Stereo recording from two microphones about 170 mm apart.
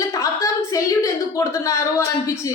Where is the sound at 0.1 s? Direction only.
20° left (ahead or behind).